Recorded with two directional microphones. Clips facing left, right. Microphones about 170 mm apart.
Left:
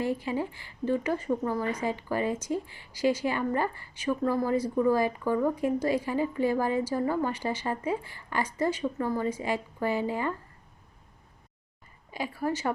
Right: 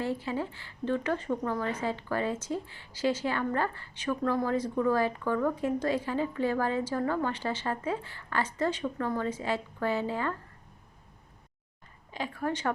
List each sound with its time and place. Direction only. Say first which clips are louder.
0.0 s speech: left 2 dB; 15° left (ahead or behind)
12.1 s speech: left 2 dB; 10° left (ahead or behind)